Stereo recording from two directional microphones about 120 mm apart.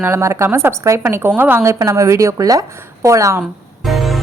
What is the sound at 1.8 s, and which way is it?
A woman's voice, 25° right (ahead or behind).